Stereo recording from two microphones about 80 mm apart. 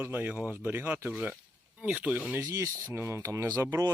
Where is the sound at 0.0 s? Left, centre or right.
Right.